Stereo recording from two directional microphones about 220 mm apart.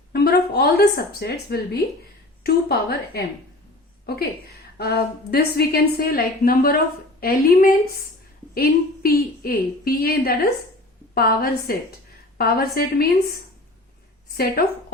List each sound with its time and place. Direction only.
0.1 s a woman's voice: 45° left (ahead or behind)